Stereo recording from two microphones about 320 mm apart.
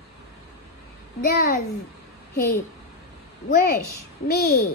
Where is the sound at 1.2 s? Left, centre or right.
Left.